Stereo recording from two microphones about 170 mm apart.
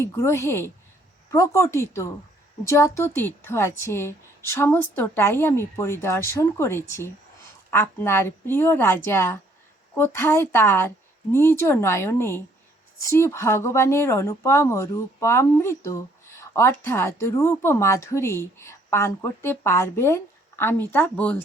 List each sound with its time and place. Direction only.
0.0 s speech: 15° left (ahead or behind)